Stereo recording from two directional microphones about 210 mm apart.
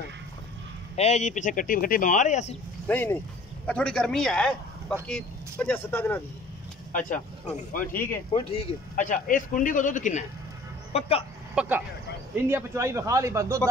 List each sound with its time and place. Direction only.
0.9 s speech: 30° left (ahead or behind)
2.9 s a man's voice: 10° left (ahead or behind)
6.9 s speech: 40° left (ahead or behind)
7.9 s speech: 10° left (ahead or behind)
8.3 s speech: 25° left (ahead or behind)
11.6 s a man's voice: 5° right (ahead or behind)